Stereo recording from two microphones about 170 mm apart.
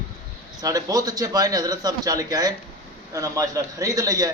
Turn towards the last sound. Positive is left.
turn(degrees=-20)  # may be behind; listen again after turning